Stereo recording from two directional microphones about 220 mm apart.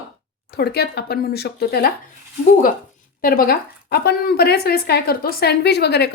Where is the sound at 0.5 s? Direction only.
45° left (ahead or behind).